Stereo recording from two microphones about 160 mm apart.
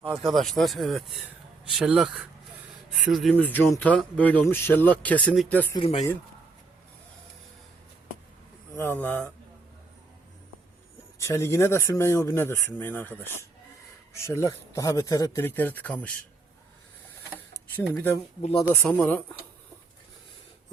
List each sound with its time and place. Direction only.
0.1 s speech: centre (ahead or behind)
5.7 s speech: 35° left (ahead or behind)
8.7 s speech: 15° left (ahead or behind)
11.2 s speech: 15° left (ahead or behind)
17.5 s speech: 15° left (ahead or behind)